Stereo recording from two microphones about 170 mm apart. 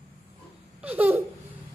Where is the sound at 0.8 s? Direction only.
10° right (ahead or behind).